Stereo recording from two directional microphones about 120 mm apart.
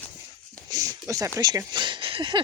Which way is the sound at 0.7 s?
30° right (ahead or behind).